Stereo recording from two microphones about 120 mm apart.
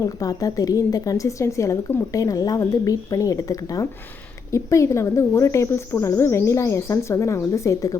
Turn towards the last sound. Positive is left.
turn(degrees=25)  # may be behind; listen again after turning